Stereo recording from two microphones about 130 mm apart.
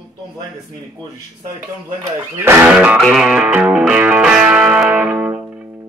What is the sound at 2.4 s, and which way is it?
Speech, 15° right (ahead or behind).